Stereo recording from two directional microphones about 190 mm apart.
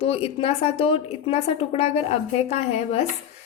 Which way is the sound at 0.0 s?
30° left (ahead or behind).